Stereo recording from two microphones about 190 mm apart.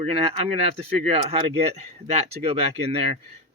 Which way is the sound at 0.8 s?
30° right (ahead or behind).